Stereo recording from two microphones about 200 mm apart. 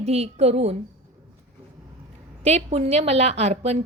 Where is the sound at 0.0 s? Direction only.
30° right (ahead or behind).